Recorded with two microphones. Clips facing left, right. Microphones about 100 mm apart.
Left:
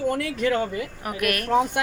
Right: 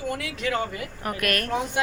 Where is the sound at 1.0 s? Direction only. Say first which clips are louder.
Right 1 dB; 15° left (ahead or behind).